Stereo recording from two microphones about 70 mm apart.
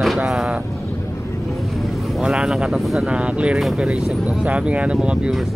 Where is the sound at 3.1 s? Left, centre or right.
Centre.